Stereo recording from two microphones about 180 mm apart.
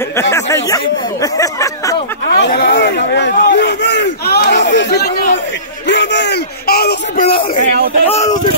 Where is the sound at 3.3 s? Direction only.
55° left (ahead or behind).